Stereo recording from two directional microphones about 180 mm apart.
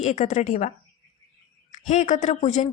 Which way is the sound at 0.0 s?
40° left (ahead or behind).